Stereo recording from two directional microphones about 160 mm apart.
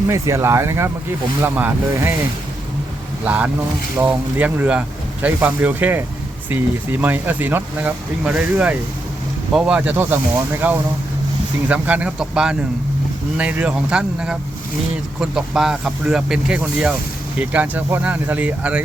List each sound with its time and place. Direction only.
0.1 s speech: 20° right (ahead or behind)
3.2 s speech: 10° right (ahead or behind)